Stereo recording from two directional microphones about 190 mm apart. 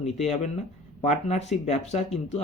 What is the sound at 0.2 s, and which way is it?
Speech, 35° left (ahead or behind).